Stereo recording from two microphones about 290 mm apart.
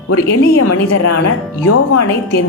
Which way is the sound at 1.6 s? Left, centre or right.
Left.